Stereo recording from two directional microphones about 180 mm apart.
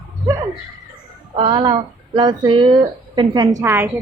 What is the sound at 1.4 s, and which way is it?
A woman's voice, 25° right (ahead or behind).